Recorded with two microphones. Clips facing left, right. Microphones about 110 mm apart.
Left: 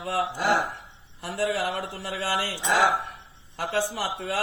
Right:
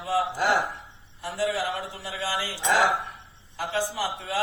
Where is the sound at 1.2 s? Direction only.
55° left (ahead or behind).